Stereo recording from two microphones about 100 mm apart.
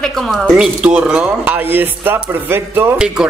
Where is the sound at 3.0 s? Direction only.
10° right (ahead or behind).